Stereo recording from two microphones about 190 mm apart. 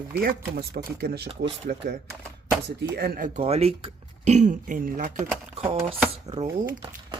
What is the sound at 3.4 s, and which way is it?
Speech, 30° right (ahead or behind).